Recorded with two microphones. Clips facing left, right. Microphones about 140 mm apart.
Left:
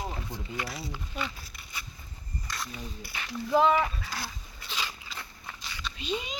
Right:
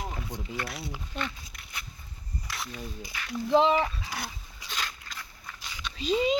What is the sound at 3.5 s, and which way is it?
Speech, 25° right (ahead or behind).